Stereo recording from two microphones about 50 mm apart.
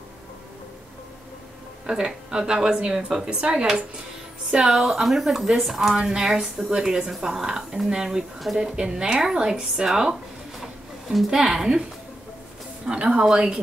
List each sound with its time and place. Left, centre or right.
1.9 s a woman's voice: centre
10.6 s a sound: centre
12.8 s a woman's voice: centre